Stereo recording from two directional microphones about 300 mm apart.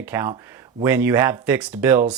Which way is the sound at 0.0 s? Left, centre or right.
Centre.